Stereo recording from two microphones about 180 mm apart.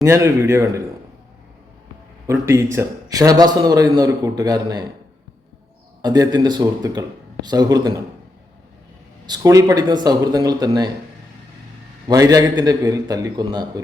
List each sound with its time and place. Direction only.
0.0 s speech: 15° right (ahead or behind)
2.2 s a man's voice: 15° right (ahead or behind)
6.0 s a man's voice: 20° right (ahead or behind)
9.2 s a man's voice: 20° right (ahead or behind)
12.0 s a man's voice: 20° right (ahead or behind)